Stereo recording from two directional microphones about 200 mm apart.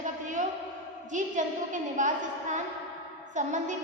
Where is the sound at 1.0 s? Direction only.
40° right (ahead or behind).